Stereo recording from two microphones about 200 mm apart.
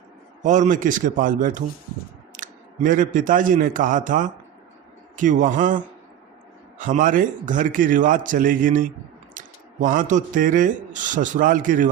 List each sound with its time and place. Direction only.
0.4 s a man's voice: 40° right (ahead or behind)